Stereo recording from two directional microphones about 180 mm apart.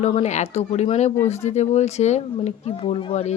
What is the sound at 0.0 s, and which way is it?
Speech, 35° left (ahead or behind).